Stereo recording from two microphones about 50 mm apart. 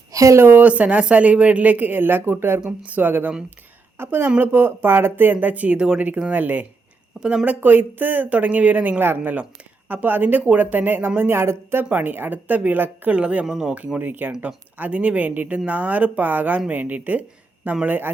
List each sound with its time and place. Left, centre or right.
0.2 s speech: right
0.6 s speech: right
11.9 s speech: right
13.1 s speech: right
13.4 s speech: centre
13.7 s speech: right
14.0 s speech: right